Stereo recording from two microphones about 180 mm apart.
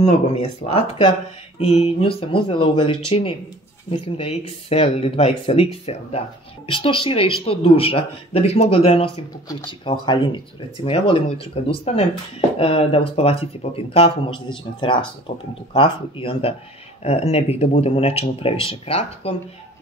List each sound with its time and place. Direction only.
0.0 s speech: 35° left (ahead or behind)